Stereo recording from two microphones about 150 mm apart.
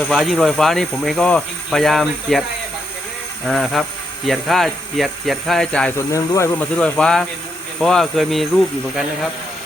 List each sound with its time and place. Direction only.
0.0 s speech: 5° left (ahead or behind)
3.4 s speech: centre (ahead or behind)
6.0 s speech: 20° left (ahead or behind)
6.6 s speech: 5° left (ahead or behind)